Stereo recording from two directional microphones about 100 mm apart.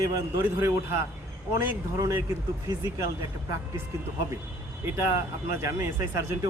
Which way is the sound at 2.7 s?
40° right (ahead or behind).